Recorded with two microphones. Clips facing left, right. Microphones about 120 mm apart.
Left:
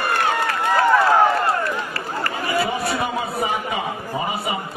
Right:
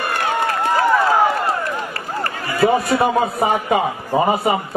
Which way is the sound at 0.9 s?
10° right (ahead or behind).